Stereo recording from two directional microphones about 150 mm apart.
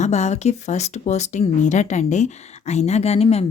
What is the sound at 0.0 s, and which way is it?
Speech, 50° left (ahead or behind).